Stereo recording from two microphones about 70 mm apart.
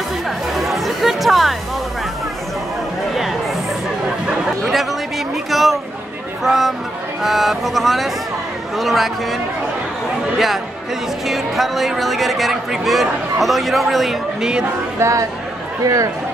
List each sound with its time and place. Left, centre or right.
0.6 s chatter: centre
5.3 s a sound: centre
6.4 s speech: centre
15.0 s speech: right